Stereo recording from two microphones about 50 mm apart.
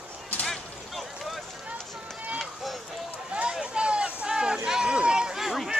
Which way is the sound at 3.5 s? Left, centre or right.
Centre.